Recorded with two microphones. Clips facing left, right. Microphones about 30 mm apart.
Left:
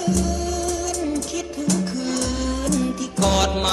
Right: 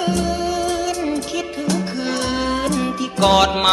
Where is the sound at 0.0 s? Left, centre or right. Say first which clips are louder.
Right 3 dB; right.